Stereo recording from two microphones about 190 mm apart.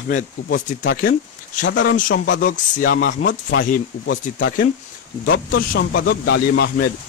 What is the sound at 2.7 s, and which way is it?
A man's voice, 50° left (ahead or behind).